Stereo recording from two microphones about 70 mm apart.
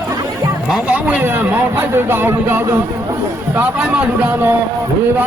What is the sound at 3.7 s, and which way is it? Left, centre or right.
Speech, centre.